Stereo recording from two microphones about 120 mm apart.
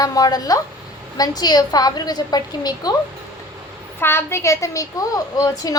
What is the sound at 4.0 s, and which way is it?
A woman's voice, 20° left (ahead or behind).